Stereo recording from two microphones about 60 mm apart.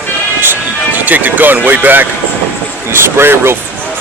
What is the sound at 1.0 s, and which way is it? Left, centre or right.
Speech, right.